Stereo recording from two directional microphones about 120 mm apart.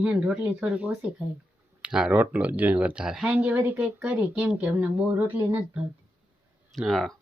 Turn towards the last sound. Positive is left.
turn(degrees=0)  # may be behind; listen again after turning